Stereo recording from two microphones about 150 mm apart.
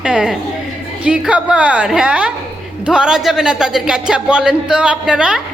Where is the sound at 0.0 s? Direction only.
5° right (ahead or behind).